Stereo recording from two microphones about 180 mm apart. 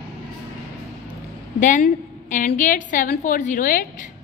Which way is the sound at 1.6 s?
45° left (ahead or behind).